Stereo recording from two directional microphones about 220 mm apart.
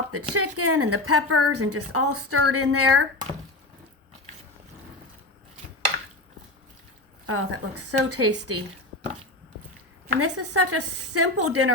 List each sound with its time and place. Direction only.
0.1 s a woman's voice: 90° right
7.3 s a woman's voice: 75° right (ahead or behind)
10.2 s a woman's voice: 90° right